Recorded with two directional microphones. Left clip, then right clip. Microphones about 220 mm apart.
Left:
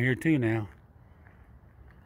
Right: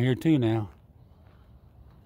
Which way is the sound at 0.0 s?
15° right (ahead or behind).